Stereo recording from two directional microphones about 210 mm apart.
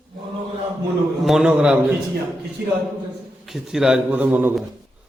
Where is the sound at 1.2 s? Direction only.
Centre (ahead or behind).